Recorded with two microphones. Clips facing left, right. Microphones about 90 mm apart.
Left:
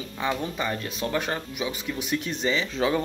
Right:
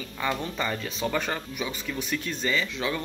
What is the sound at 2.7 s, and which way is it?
Speech, 30° left (ahead or behind).